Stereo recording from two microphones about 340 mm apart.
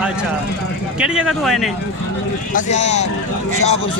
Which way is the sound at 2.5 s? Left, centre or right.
Left.